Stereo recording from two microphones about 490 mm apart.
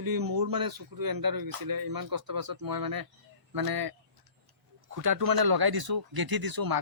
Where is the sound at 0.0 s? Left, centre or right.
Right.